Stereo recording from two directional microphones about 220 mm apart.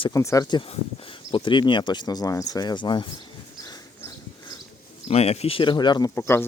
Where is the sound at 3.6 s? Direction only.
15° left (ahead or behind).